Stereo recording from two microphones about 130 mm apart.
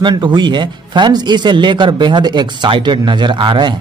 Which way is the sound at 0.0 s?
35° right (ahead or behind).